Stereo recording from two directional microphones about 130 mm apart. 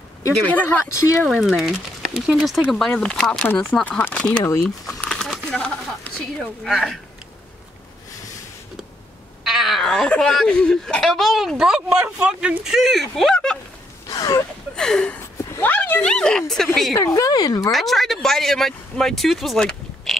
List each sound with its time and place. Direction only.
0.5 s speech: 10° left (ahead or behind)
0.8 s speech: 25° left (ahead or behind)
1.2 s speech: centre (ahead or behind)
4.6 s speech: centre (ahead or behind)
5.0 s a sound: 5° left (ahead or behind)
6.1 s speech: 5° left (ahead or behind)
9.4 s speech: centre (ahead or behind)
14.0 s a sound: 25° left (ahead or behind)
14.8 s speech: 5° left (ahead or behind)
16.9 s speech: 25° left (ahead or behind)
17.6 s speech: centre (ahead or behind)